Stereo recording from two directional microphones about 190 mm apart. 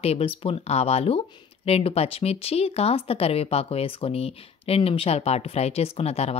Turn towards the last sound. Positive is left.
turn(degrees=35)  # may be behind; listen again after turning